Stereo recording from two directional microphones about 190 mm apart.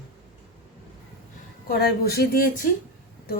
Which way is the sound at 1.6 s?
55° left (ahead or behind).